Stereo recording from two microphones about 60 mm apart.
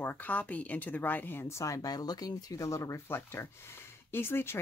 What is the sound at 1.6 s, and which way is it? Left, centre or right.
Speech, left.